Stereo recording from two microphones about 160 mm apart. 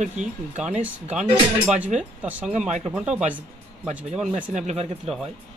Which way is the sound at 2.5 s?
45° right (ahead or behind).